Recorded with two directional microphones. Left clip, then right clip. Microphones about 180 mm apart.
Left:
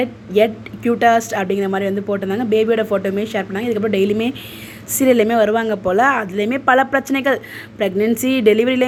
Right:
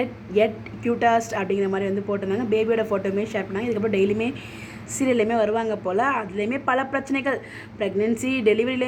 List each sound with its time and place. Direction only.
0.0 s speech: 25° left (ahead or behind)